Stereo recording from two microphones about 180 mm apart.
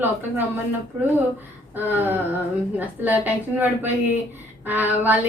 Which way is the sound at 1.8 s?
10° right (ahead or behind).